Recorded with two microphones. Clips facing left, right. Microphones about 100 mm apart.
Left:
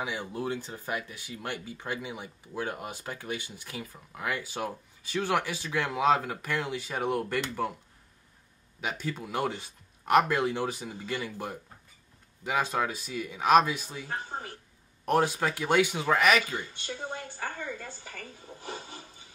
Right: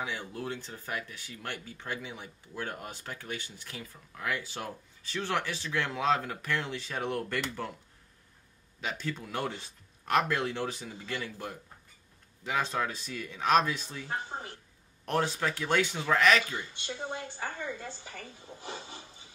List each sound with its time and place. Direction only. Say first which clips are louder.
0.3 s speech: left 4 dB; 10° left (ahead or behind)
8.8 s speech: left 2 dB; 15° left (ahead or behind)
15.0 s speech: left 4 dB; 10° left (ahead or behind)
16.5 s a woman's voice: left 2 dB; 45° left (ahead or behind)